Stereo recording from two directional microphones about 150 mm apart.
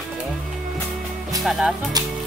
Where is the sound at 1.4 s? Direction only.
Centre (ahead or behind).